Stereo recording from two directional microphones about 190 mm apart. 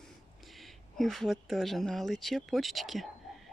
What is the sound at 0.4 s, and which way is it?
Speech, centre (ahead or behind).